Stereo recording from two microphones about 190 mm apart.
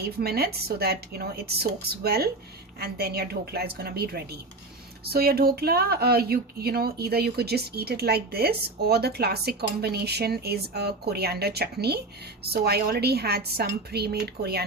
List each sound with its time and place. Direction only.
0.0 s speech: 55° right (ahead or behind)